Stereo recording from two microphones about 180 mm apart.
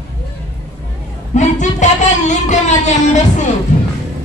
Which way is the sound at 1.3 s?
45° left (ahead or behind).